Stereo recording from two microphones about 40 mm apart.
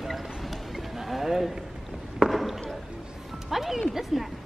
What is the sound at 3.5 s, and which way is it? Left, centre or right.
Speech, centre.